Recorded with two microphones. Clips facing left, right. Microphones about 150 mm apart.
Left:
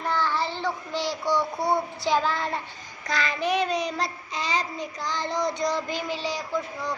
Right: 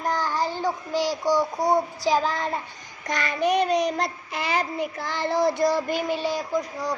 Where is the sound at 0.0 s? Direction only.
40° right (ahead or behind).